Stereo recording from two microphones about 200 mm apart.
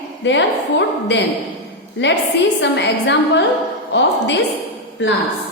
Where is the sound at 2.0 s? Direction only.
60° left (ahead or behind).